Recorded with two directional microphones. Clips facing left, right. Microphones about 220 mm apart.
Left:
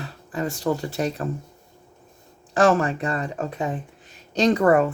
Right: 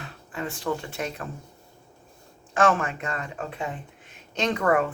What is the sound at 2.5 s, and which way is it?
Speech, 35° left (ahead or behind).